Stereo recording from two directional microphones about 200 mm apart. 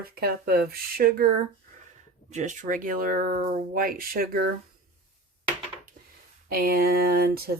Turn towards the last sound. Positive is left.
turn(degrees=-50)  # may be behind; listen again after turning